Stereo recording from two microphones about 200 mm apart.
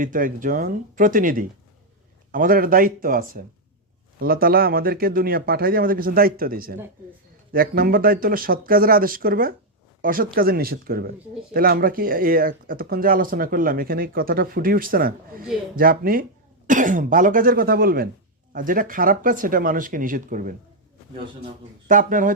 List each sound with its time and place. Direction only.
0.0 s speech: 40° right (ahead or behind)
21.8 s speech: 40° right (ahead or behind)